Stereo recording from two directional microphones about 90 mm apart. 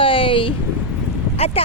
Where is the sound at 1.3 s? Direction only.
90° left.